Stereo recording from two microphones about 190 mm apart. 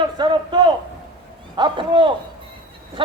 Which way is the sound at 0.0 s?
25° right (ahead or behind).